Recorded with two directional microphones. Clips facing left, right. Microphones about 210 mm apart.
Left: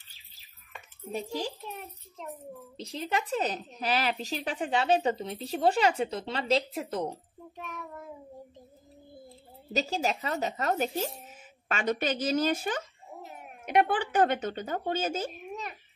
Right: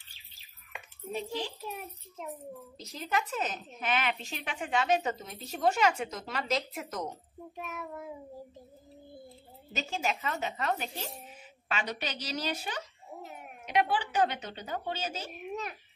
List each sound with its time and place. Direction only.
2.8 s a woman's voice: 30° left (ahead or behind)
7.5 s speech: 5° right (ahead or behind)
9.7 s a woman's voice: 35° left (ahead or behind)
13.2 s a sound: centre (ahead or behind)
13.7 s speech: 55° left (ahead or behind)
15.5 s a sound: centre (ahead or behind)